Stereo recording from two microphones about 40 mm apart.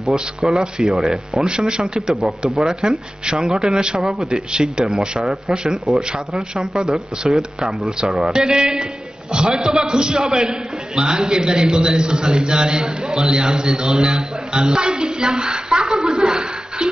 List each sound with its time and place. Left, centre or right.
0.0 s a man's voice: centre